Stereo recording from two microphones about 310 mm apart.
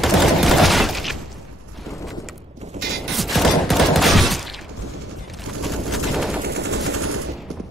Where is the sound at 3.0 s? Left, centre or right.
Centre.